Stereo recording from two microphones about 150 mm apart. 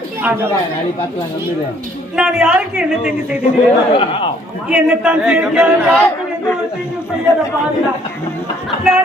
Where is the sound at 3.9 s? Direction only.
35° left (ahead or behind).